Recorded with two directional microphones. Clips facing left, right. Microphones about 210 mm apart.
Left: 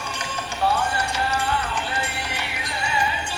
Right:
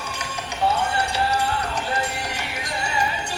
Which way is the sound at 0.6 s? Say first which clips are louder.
Even; 20° right (ahead or behind).